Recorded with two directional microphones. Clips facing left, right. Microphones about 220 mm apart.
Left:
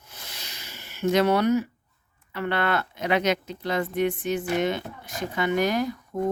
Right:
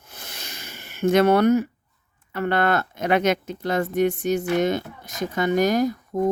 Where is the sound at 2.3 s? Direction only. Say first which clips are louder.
Right 4 dB; 45° right (ahead or behind).